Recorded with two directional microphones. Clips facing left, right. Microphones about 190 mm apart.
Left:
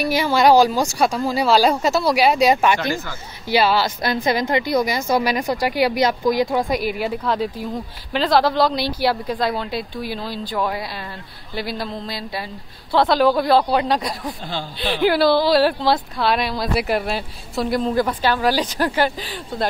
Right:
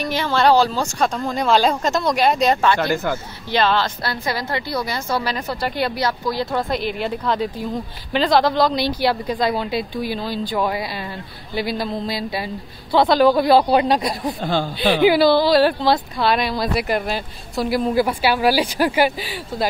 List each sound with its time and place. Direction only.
0.0 s a woman's voice: 10° left (ahead or behind)
2.9 s speech: 55° right (ahead or behind)
3.4 s a woman's voice: 10° left (ahead or behind); by 14.3 s 15° right (ahead or behind)
14.4 s speech: 50° right (ahead or behind)
15.0 s a woman's voice: centre (ahead or behind)